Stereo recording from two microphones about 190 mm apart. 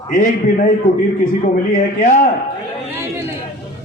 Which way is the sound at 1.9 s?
45° left (ahead or behind).